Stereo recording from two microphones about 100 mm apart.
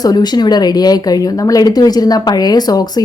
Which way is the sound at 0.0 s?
45° left (ahead or behind).